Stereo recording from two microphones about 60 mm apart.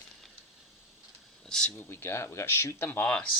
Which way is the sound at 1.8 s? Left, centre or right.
Left.